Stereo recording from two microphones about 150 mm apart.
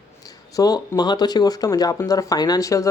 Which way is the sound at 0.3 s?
25° left (ahead or behind).